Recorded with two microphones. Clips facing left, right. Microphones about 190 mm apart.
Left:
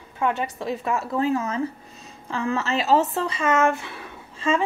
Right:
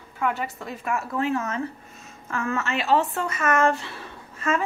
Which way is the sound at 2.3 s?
30° left (ahead or behind).